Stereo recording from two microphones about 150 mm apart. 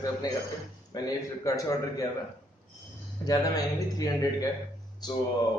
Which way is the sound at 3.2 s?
25° left (ahead or behind).